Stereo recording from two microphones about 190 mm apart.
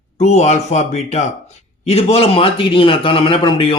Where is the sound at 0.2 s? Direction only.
35° left (ahead or behind).